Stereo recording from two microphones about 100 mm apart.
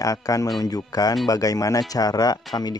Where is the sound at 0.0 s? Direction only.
35° left (ahead or behind).